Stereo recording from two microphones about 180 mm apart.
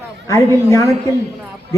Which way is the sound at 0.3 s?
15° left (ahead or behind).